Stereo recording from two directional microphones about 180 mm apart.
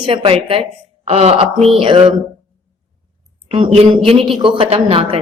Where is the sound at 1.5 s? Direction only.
Centre (ahead or behind).